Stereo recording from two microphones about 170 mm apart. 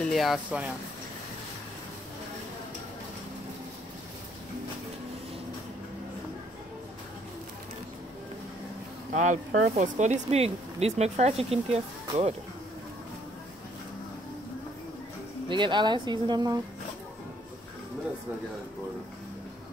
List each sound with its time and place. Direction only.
0.0 s speech: centre (ahead or behind)
9.1 s speech: 45° right (ahead or behind)
15.4 s speech: 30° right (ahead or behind)